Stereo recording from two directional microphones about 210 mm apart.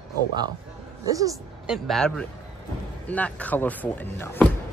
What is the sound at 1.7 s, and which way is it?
Speech, centre (ahead or behind).